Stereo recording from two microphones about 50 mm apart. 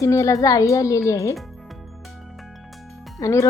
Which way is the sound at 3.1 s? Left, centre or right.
Left.